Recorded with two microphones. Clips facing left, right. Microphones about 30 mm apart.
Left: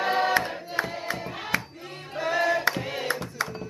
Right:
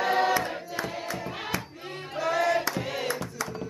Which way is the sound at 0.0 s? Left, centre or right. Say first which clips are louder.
Even; centre.